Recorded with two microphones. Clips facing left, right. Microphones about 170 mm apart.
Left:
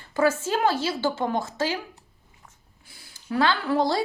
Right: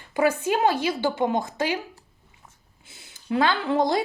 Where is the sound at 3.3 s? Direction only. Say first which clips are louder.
Right 1 dB; 20° right (ahead or behind).